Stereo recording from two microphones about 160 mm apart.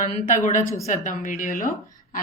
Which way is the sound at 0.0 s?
55° left (ahead or behind).